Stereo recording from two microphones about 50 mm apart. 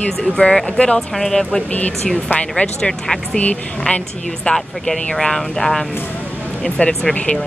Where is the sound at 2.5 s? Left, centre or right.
Centre.